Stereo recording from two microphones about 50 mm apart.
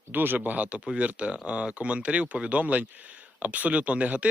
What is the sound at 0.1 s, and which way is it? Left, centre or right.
Speech, right.